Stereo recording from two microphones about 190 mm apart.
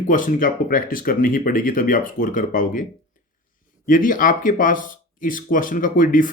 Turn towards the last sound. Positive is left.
turn(degrees=45)  # may be behind; listen again after turning